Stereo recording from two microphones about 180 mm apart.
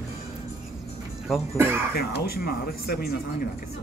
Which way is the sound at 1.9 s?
60° left (ahead or behind).